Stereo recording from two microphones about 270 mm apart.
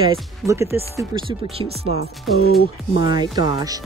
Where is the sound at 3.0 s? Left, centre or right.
Centre.